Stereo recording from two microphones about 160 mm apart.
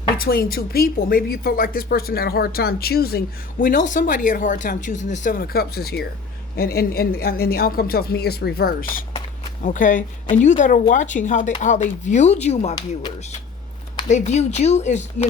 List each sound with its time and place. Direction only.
0.2 s speech: 65° left (ahead or behind)
9.6 s speech: 55° left (ahead or behind)
12.7 s speech: 25° left (ahead or behind)
14.1 s speech: 45° left (ahead or behind)